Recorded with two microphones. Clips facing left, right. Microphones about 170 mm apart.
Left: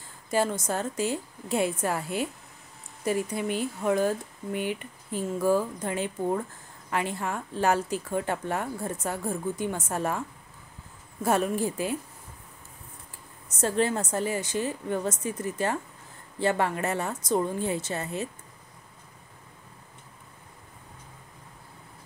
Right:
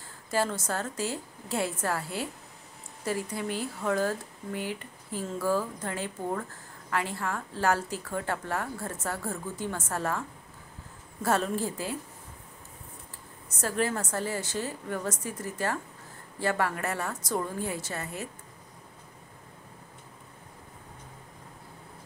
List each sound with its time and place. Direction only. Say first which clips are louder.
0.3 s a woman's voice: left 3 dB; 15° left (ahead or behind)
11.2 s speech: left 2 dB; 15° left (ahead or behind)
13.6 s a woman's voice: left 4 dB; 25° left (ahead or behind)